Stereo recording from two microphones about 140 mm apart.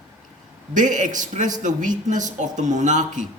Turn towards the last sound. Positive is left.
turn(degrees=-60)  # may be behind; listen again after turning